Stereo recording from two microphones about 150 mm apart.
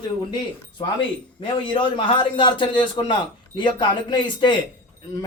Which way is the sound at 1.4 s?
35° left (ahead or behind).